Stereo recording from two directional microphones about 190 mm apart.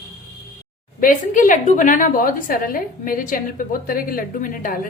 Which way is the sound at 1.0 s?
45° left (ahead or behind).